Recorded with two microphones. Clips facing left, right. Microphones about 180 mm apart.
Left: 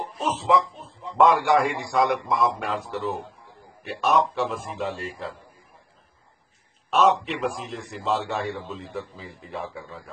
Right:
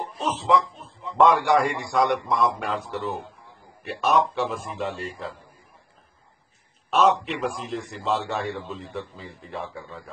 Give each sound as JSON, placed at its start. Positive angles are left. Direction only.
{"t": 0.3, "sound": "a man's voice", "side_deg": 0}
{"t": 6.9, "sound": "a man's voice", "side_deg": 0}